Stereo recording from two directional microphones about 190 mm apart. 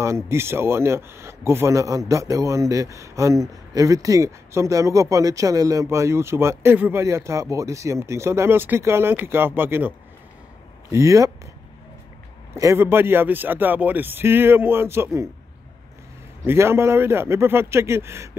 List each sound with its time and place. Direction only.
0.0 s a man's voice: 15° right (ahead or behind)
12.5 s a man's voice: 15° right (ahead or behind)
16.4 s a man's voice: 15° right (ahead or behind)